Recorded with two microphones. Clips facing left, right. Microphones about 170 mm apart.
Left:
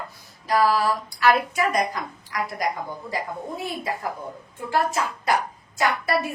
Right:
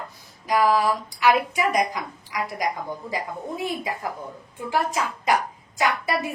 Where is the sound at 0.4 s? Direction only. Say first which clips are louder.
Even; 15° right (ahead or behind).